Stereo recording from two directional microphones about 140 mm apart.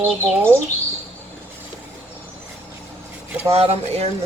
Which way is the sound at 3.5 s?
45° right (ahead or behind).